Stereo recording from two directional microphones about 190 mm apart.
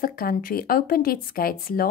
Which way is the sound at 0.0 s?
50° left (ahead or behind).